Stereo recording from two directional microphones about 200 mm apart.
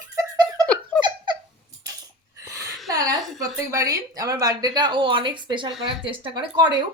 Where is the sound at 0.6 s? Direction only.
5° left (ahead or behind).